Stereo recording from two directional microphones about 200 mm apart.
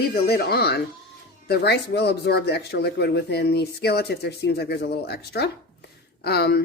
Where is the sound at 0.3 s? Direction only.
55° left (ahead or behind).